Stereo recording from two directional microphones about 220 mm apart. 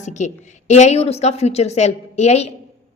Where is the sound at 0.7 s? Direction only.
30° left (ahead or behind).